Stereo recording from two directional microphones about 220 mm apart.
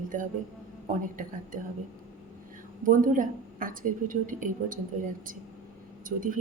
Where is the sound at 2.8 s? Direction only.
35° right (ahead or behind).